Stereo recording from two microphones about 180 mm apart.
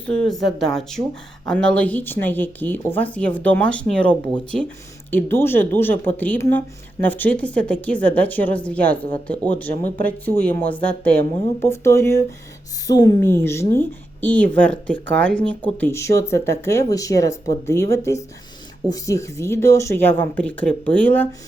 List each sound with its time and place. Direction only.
0.1 s a woman's voice: 5° left (ahead or behind)
10.0 s a woman's voice: 10° left (ahead or behind)